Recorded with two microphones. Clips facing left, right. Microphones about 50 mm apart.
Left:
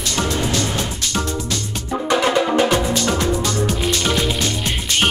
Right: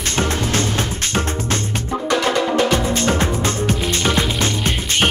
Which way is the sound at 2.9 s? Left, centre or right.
Right.